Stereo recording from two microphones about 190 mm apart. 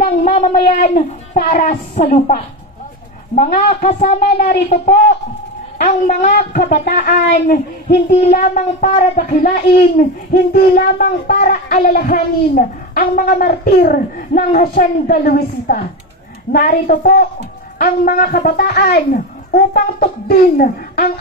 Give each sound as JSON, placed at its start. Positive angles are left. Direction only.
{"t": 0.0, "sound": "a sound", "side_deg": 35}
{"t": 0.8, "sound": "a woman's voice", "side_deg": 45}
{"t": 5.8, "sound": "a woman's voice", "side_deg": 40}
{"t": 6.7, "sound": "a woman's voice", "side_deg": 55}